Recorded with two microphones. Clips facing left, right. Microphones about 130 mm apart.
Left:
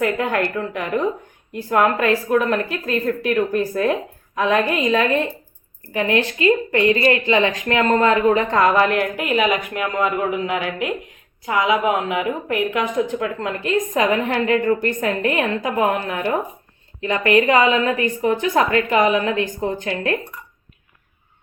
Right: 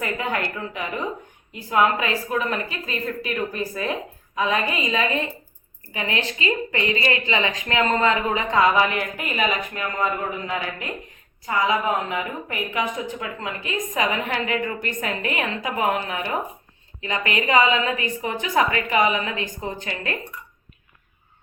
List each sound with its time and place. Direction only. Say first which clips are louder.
0.0 s a woman's voice: left 6 dB; 60° left (ahead or behind)